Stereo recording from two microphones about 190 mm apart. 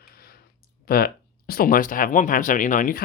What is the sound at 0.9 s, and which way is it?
Speech, 50° left (ahead or behind).